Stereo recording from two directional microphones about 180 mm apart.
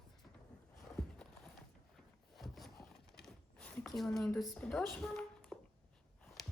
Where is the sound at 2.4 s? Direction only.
Centre (ahead or behind).